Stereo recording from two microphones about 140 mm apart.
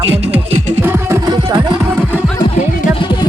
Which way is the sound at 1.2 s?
30° right (ahead or behind).